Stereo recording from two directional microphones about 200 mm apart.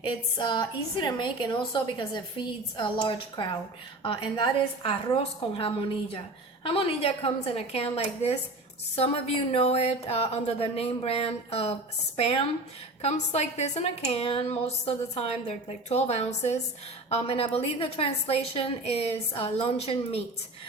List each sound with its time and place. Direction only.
0.0 s a woman's voice: 20° left (ahead or behind)